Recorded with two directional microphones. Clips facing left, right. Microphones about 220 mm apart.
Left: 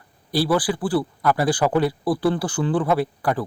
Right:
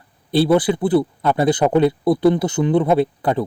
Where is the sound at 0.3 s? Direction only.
25° right (ahead or behind).